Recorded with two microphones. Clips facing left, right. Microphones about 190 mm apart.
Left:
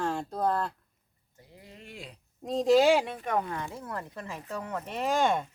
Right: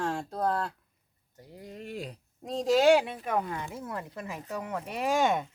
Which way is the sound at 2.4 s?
Centre (ahead or behind).